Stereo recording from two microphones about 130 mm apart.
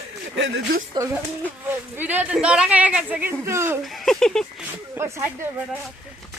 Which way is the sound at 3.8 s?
Centre (ahead or behind).